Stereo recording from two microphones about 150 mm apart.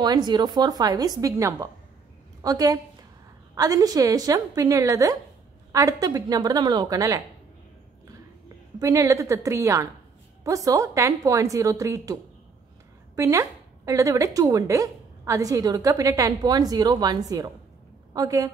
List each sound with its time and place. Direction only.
0.0 s a woman's voice: 30° right (ahead or behind)
8.7 s a woman's voice: 20° right (ahead or behind)